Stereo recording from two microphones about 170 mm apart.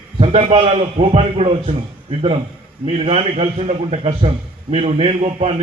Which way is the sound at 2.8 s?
35° right (ahead or behind).